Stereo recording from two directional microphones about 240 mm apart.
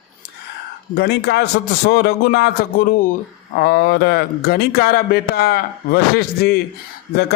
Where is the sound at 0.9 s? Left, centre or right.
Left.